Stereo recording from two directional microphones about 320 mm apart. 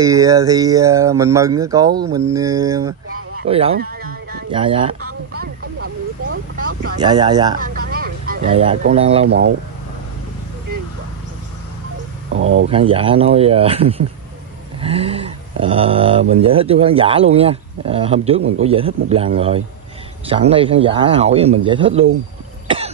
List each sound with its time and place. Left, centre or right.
0.0 s speech: centre
3.4 s a sound: centre
4.5 s speech: centre
5.3 s speech: right
7.0 s speech: centre
7.5 s a sound: right
8.8 s speech: centre
12.3 s speech: right
12.6 s speech: centre
22.7 s cough: centre